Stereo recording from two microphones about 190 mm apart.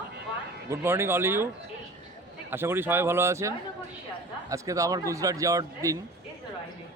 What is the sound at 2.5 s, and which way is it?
A man's voice, 10° right (ahead or behind).